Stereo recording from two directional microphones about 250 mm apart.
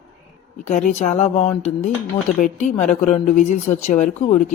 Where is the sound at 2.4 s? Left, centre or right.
Left.